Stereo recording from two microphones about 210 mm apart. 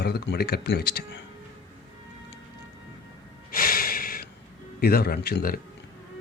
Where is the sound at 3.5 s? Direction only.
45° left (ahead or behind).